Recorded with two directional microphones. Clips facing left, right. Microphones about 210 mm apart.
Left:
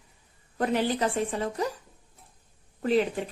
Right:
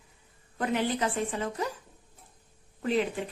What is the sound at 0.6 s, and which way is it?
Speech, 40° left (ahead or behind).